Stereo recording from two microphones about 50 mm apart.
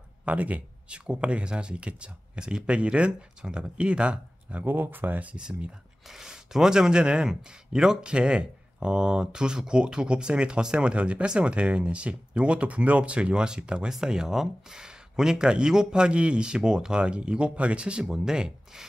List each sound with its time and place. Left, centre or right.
0.2 s speech: right
4.6 s speech: right
5.3 s speech: centre
6.0 s speech: centre